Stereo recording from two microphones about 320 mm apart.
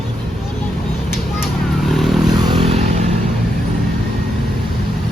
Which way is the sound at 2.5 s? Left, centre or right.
Centre.